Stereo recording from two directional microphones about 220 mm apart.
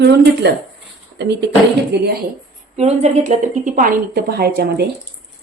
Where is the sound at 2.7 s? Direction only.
30° right (ahead or behind).